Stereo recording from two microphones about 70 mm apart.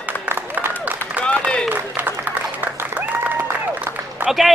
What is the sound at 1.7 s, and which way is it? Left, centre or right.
Applause, right.